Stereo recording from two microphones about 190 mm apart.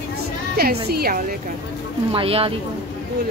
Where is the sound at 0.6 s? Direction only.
55° right (ahead or behind).